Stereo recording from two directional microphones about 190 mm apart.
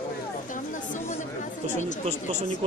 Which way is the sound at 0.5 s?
45° left (ahead or behind).